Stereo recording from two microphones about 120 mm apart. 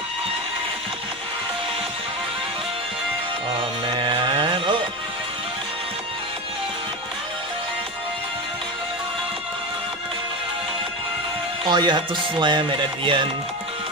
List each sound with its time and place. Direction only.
3.8 s cattle: 45° right (ahead or behind)
11.6 s music: 40° right (ahead or behind)